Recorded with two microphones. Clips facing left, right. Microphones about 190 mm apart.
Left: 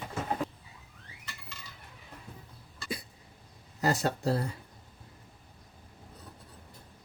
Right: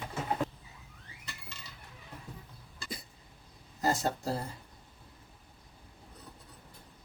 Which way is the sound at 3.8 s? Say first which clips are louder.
Left 2 dB; 75° left (ahead or behind).